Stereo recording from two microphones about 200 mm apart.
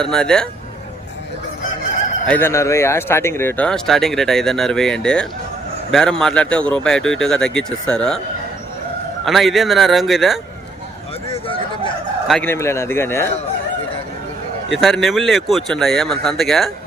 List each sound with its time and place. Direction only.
0.0 s speech: 5° left (ahead or behind)
2.2 s speech: 10° left (ahead or behind)
9.2 s speech: centre (ahead or behind)
11.3 s a sound: 25° left (ahead or behind)
12.3 s speech: 10° left (ahead or behind)
14.7 s speech: centre (ahead or behind)